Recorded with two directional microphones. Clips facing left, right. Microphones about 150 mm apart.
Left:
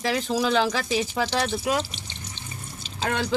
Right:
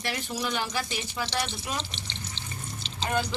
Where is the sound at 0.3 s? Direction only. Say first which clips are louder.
Left 11 dB; 90° left.